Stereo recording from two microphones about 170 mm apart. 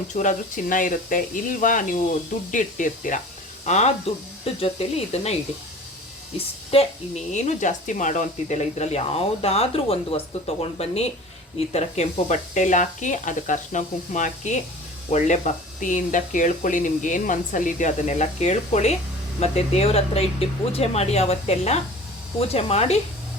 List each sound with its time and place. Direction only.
0.1 s speech: 45° left (ahead or behind)
6.7 s speech: 35° left (ahead or behind)